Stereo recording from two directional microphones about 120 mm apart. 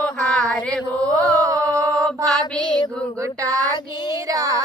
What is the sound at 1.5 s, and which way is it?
Mantra, 25° right (ahead or behind).